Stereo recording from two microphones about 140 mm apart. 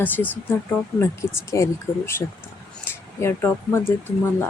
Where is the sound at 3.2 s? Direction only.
20° left (ahead or behind).